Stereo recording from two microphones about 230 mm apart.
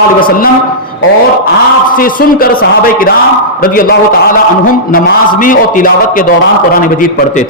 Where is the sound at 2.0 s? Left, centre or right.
Left.